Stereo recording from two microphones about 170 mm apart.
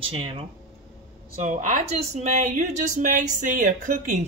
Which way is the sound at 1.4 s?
45° right (ahead or behind).